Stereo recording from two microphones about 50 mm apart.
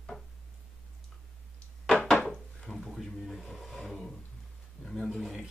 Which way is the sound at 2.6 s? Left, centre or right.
Centre.